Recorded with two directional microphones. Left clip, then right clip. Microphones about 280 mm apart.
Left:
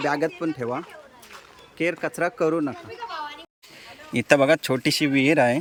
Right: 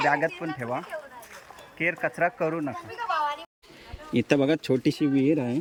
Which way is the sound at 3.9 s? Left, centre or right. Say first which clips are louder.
Left 5 dB; centre.